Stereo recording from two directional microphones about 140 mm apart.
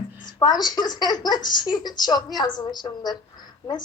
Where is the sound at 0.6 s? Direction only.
30° left (ahead or behind).